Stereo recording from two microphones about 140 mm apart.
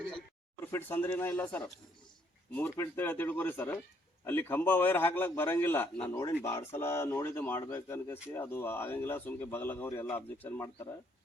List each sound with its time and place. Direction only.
0.6 s speech: 15° left (ahead or behind)